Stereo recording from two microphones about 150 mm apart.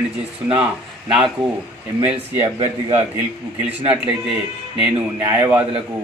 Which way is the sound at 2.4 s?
45° right (ahead or behind).